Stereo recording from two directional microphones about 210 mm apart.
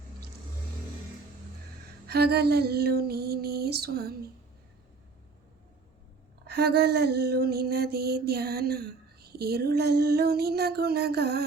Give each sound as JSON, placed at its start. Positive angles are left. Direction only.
{"t": 2.0, "sound": "mantra", "side_deg": -50}
{"t": 6.5, "sound": "mantra", "side_deg": -50}